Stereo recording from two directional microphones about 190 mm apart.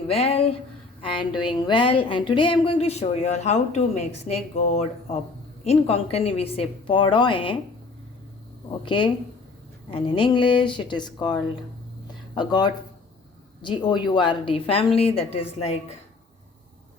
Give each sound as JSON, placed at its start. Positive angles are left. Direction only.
{"t": 0.1, "sound": "a woman's voice", "side_deg": 30}
{"t": 8.8, "sound": "a woman's voice", "side_deg": 25}